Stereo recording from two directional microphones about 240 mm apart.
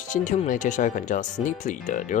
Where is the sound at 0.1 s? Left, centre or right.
Left.